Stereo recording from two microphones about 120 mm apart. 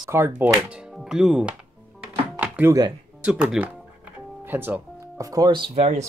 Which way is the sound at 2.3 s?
10° right (ahead or behind).